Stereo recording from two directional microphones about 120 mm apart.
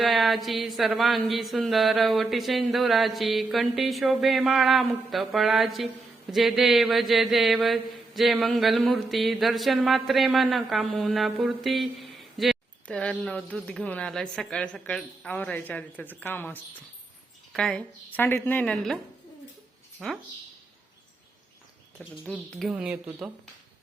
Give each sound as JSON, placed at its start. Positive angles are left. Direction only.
{"t": 0.0, "sound": "mantra", "side_deg": 0}
{"t": 13.0, "sound": "speech", "side_deg": 10}
{"t": 18.2, "sound": "speech", "side_deg": 15}
{"t": 20.0, "sound": "mantra", "side_deg": 0}
{"t": 21.9, "sound": "speech", "side_deg": 10}
{"t": 22.7, "sound": "speech", "side_deg": -5}